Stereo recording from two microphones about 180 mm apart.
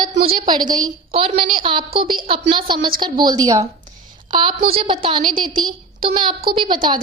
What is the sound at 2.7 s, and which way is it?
Speech, 55° right (ahead or behind).